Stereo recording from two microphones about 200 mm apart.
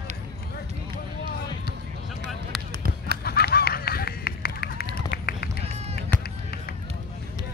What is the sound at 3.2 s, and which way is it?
Run, 50° left (ahead or behind).